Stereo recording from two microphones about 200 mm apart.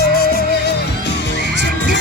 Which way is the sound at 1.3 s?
60° left (ahead or behind).